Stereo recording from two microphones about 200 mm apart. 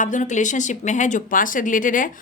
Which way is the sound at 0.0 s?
40° left (ahead or behind).